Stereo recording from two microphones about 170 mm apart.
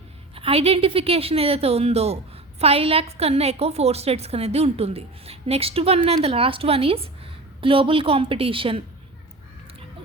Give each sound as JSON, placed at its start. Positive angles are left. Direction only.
{"t": 0.3, "sound": "a woman's voice", "side_deg": -35}